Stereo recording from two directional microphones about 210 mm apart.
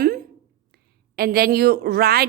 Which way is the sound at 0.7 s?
45° right (ahead or behind).